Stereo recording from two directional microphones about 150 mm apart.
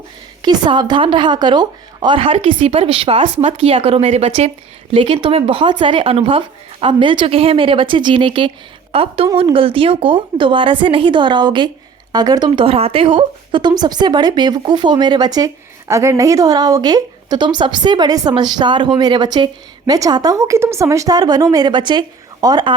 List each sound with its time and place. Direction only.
0.4 s a woman's voice: 30° right (ahead or behind)